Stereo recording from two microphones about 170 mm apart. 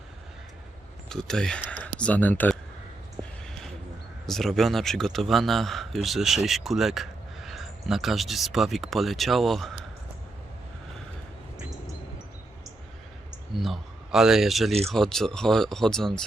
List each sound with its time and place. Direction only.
1.1 s speech: 5° left (ahead or behind)
4.3 s speech: centre (ahead or behind)
13.3 s speech: centre (ahead or behind)